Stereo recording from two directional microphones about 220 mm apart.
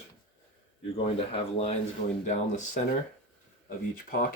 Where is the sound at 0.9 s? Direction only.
25° left (ahead or behind).